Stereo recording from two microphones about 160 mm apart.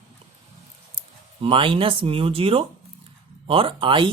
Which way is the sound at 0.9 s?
35° right (ahead or behind).